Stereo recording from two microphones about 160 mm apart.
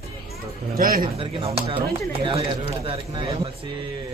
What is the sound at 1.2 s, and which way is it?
Speech, 35° right (ahead or behind).